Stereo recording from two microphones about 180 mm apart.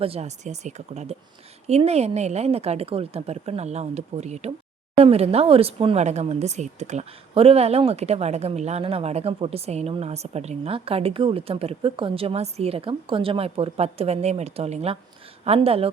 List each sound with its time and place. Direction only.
0.0 s speech: 35° right (ahead or behind)